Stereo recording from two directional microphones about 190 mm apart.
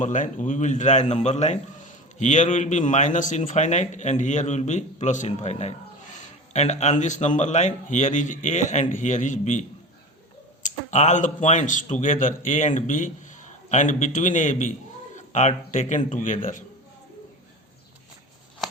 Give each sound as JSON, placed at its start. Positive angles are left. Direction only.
{"t": 0.0, "sound": "a man's voice", "side_deg": 40}
{"t": 10.7, "sound": "a man's voice", "side_deg": 40}